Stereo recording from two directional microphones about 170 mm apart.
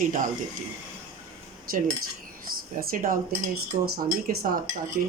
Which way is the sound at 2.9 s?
55° right (ahead or behind).